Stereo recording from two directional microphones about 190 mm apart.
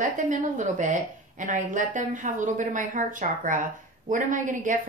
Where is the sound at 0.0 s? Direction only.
40° right (ahead or behind).